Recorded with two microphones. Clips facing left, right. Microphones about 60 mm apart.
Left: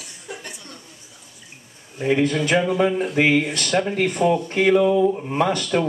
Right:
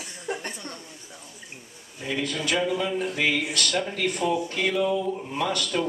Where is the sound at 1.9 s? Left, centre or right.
Left.